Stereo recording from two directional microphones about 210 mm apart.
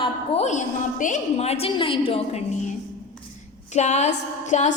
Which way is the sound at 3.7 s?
30° left (ahead or behind).